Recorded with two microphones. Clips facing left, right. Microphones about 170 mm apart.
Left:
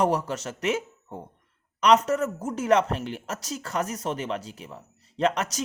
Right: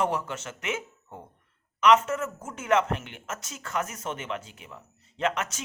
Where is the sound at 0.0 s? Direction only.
40° left (ahead or behind).